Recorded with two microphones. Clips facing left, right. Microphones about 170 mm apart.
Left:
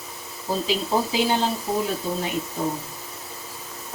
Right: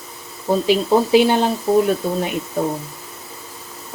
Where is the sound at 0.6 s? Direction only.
60° right (ahead or behind).